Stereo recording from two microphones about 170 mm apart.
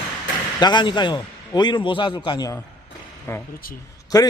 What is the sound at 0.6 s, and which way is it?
Speech, 25° left (ahead or behind).